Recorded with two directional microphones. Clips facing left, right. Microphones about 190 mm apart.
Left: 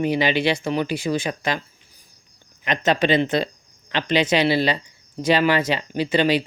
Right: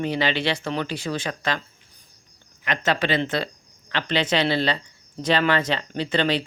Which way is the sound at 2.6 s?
20° left (ahead or behind).